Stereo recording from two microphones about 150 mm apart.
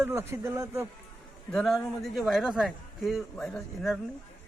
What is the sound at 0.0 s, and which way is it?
Speech, 15° right (ahead or behind).